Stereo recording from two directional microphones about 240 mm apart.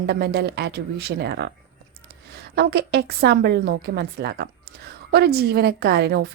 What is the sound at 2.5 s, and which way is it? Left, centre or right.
Speech, right.